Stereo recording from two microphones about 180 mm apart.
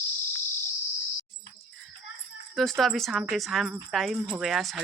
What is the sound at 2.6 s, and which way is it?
Speech, centre (ahead or behind).